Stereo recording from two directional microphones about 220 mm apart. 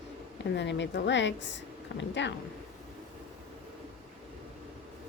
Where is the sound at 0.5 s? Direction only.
55° left (ahead or behind).